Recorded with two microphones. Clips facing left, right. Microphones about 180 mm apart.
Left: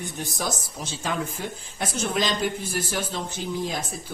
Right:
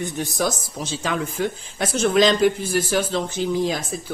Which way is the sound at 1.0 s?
90° right.